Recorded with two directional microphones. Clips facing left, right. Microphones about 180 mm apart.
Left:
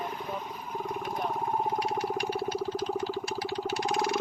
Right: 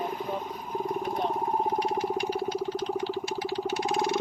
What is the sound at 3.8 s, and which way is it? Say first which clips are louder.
Vehicle: right 1 dB; 20° right (ahead or behind).